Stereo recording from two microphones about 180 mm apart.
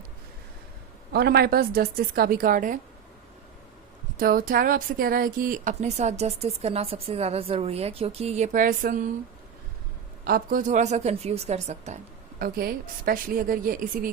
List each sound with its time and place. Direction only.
1.1 s a woman's voice: 60° right (ahead or behind)
4.2 s speech: 50° right (ahead or behind)
10.2 s speech: 55° right (ahead or behind)
12.4 s a woman's voice: 55° right (ahead or behind)